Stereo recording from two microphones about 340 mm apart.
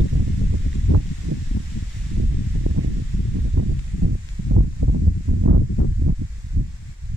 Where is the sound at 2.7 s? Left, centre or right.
Right.